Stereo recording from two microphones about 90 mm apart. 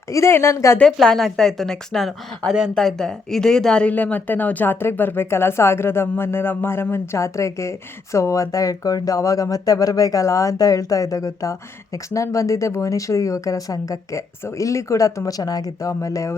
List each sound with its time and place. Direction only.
0.1 s speech: 30° left (ahead or behind)
0.8 s a woman's voice: 5° left (ahead or behind); by 16.3 s 35° left (ahead or behind)